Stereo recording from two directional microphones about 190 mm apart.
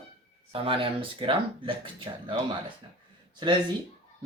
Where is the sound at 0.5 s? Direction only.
30° right (ahead or behind).